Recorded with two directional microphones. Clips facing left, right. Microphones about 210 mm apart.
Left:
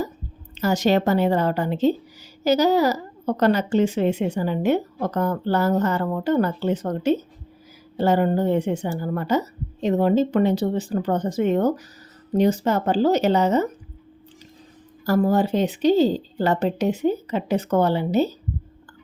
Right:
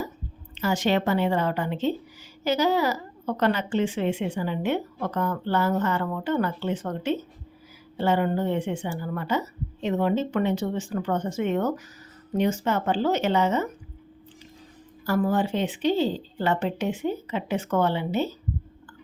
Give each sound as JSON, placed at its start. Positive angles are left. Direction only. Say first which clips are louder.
{"t": 0.5, "sound": "a woman's voice", "louder": "left 4 dB", "side_deg": 40}
{"t": 15.0, "sound": "a woman's voice", "louder": "left 4 dB", "side_deg": 40}